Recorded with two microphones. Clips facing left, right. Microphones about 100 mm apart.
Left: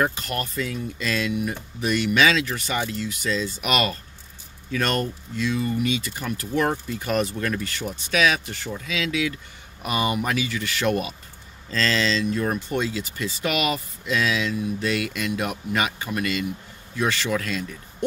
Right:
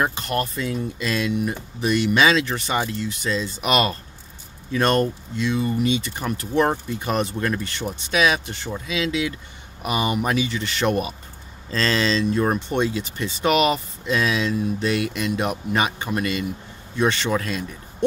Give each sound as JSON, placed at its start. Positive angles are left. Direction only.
{"t": 0.0, "sound": "speech", "side_deg": -25}